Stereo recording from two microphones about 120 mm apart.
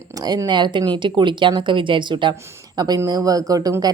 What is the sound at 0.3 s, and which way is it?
A woman's voice, 35° right (ahead or behind).